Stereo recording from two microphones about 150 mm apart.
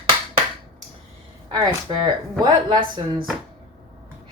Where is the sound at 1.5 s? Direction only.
30° right (ahead or behind).